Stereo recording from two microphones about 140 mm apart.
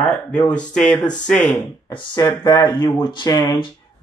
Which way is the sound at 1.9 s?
35° left (ahead or behind).